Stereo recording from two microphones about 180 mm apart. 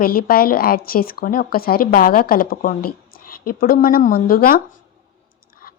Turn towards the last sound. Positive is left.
turn(degrees=55)  # may be behind; listen again after turning